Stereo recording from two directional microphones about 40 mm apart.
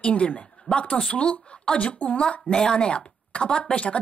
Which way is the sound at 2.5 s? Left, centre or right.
Centre.